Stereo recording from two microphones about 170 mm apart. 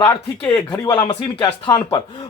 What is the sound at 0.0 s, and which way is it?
Speech, 20° left (ahead or behind).